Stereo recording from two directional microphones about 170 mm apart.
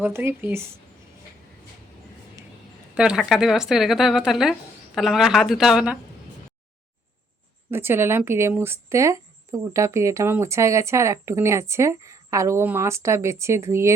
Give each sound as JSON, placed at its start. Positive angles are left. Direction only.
{"t": 0.0, "sound": "speech", "side_deg": -15}
{"t": 2.9, "sound": "speech", "side_deg": -5}
{"t": 7.7, "sound": "speech", "side_deg": -15}